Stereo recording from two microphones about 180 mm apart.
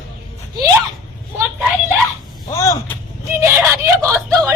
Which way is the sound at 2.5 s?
15° left (ahead or behind).